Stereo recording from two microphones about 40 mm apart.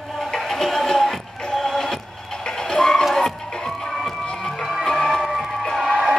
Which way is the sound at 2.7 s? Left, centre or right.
Centre.